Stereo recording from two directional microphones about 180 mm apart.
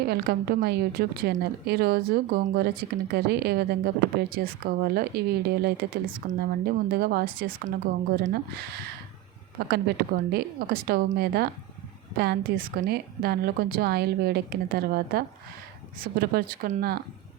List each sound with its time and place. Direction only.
0.0 s a woman's voice: 60° right (ahead or behind)